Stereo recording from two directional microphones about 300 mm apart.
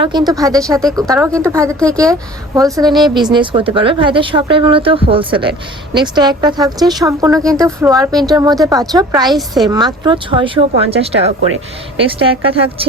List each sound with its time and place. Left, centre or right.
0.0 s a woman's voice: centre